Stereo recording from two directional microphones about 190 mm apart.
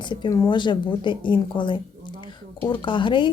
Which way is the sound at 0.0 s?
25° left (ahead or behind).